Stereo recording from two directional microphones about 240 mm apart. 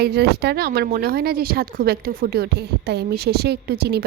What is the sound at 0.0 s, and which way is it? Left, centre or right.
Speech, right.